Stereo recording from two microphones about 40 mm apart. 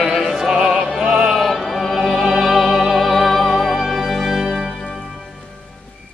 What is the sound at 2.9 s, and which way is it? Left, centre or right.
Music, centre.